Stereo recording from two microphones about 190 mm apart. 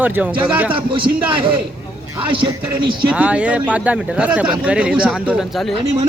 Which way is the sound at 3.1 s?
5° right (ahead or behind).